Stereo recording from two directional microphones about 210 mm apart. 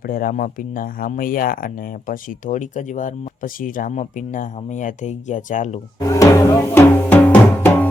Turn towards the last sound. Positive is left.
turn(degrees=10)  # may be behind; listen again after turning